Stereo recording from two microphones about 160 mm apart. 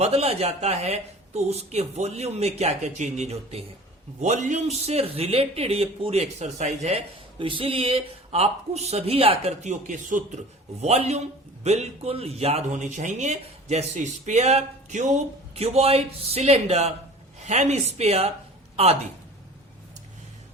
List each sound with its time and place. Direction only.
0.0 s speech: 40° right (ahead or behind)
7.3 s speech: 35° right (ahead or behind)